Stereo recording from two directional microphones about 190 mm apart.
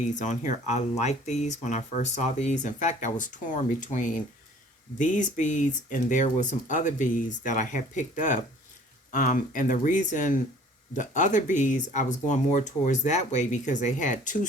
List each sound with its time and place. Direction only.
0.0 s speech: 40° left (ahead or behind)